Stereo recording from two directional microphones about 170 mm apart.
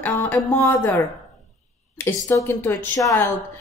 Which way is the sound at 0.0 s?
10° left (ahead or behind).